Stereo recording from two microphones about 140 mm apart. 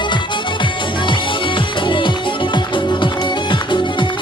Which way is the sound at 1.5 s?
35° left (ahead or behind).